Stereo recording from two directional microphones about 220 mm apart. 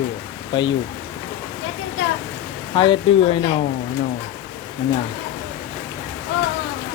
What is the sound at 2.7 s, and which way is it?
Speech, 20° left (ahead or behind).